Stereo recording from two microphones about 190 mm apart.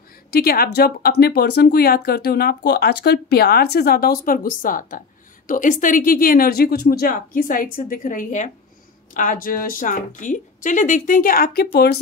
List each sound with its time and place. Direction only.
0.3 s a woman's voice: 55° left (ahead or behind)